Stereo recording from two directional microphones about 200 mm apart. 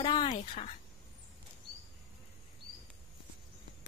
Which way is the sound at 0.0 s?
20° left (ahead or behind).